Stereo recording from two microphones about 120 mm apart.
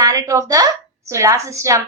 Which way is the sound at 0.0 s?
30° right (ahead or behind).